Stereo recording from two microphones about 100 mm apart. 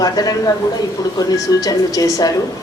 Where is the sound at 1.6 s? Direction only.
35° left (ahead or behind).